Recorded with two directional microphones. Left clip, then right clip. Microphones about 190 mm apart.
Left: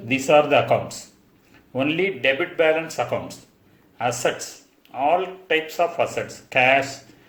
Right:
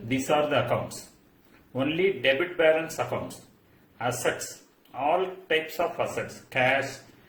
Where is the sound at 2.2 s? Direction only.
25° left (ahead or behind).